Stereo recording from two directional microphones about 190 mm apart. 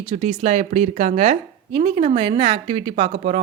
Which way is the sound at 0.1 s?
35° right (ahead or behind).